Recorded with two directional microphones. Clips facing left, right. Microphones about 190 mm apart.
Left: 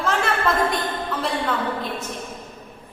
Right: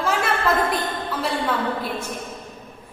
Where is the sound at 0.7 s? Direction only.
5° right (ahead or behind).